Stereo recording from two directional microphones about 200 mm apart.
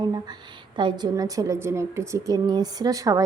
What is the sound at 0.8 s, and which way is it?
A woman's voice, 20° right (ahead or behind).